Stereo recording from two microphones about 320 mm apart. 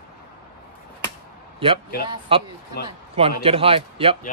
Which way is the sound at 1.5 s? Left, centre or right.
Centre.